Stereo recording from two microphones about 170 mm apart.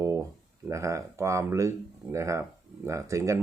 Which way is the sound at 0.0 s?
15° right (ahead or behind).